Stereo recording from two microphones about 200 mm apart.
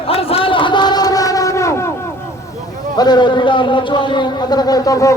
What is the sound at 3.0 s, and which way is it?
Speech, 20° left (ahead or behind).